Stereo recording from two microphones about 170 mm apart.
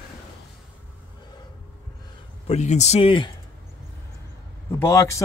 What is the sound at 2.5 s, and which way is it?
Speech, 40° left (ahead or behind).